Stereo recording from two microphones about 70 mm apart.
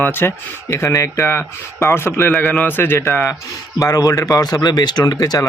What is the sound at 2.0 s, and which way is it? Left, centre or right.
A man's voice, left.